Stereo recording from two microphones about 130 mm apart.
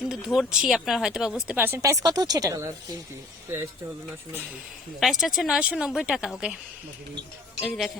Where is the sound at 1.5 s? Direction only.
15° right (ahead or behind).